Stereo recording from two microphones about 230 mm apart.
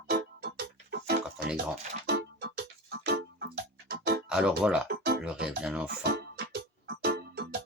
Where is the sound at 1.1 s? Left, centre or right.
Right.